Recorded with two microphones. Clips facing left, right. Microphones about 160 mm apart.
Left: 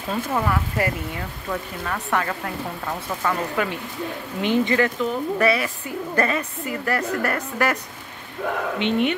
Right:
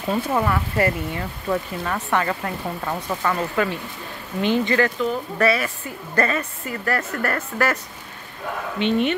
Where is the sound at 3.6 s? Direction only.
15° left (ahead or behind).